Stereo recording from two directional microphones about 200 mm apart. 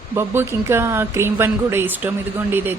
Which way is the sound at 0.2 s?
10° right (ahead or behind).